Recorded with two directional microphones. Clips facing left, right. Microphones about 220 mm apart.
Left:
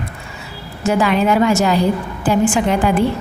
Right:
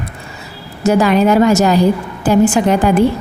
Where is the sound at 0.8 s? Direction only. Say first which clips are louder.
Right 4 dB; 40° right (ahead or behind).